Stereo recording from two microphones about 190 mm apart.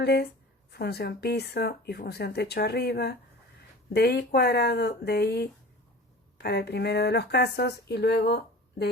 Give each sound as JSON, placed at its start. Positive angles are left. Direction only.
{"t": 0.0, "sound": "speech", "side_deg": 60}